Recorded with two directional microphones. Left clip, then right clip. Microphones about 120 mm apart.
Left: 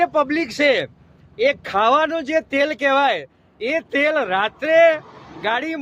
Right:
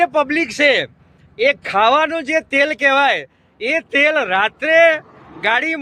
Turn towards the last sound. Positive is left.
turn(degrees=-25)  # may be behind; listen again after turning